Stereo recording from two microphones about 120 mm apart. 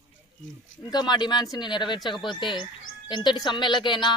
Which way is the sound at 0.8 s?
40° left (ahead or behind).